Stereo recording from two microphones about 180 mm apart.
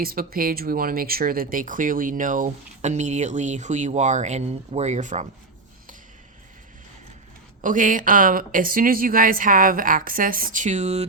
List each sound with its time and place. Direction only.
0.0 s speech: 55° right (ahead or behind)
7.6 s speech: 45° right (ahead or behind)